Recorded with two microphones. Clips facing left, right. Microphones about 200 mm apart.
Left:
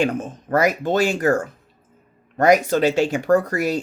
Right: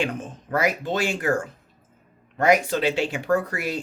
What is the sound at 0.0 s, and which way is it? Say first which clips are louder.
Speech: left 6 dB; 45° left (ahead or behind).